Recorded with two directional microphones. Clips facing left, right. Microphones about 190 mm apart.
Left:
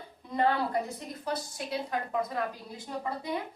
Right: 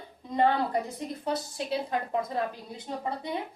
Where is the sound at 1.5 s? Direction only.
30° right (ahead or behind).